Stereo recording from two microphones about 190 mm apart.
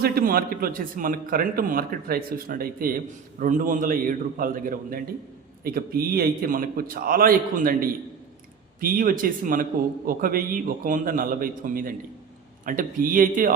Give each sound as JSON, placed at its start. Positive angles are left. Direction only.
{"t": 0.0, "sound": "a man's voice", "side_deg": -50}